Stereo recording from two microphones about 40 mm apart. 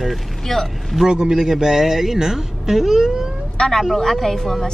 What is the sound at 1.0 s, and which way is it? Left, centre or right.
A man's voice, centre.